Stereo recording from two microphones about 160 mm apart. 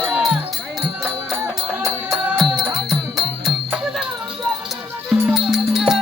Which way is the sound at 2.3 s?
Centre (ahead or behind).